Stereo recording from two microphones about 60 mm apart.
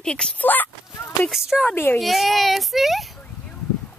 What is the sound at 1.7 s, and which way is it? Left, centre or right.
Speech, left.